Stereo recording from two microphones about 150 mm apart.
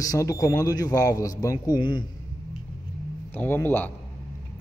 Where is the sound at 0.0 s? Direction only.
20° left (ahead or behind).